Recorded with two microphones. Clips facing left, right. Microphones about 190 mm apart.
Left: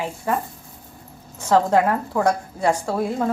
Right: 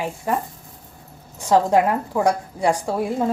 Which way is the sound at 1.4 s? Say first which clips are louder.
Right 1 dB; 15° right (ahead or behind).